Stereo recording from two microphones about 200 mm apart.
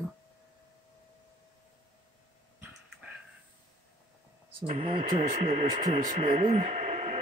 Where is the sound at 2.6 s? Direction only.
5° right (ahead or behind).